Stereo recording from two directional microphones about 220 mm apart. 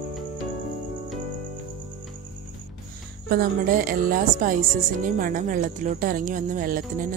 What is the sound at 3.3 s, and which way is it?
A woman's voice, 40° right (ahead or behind).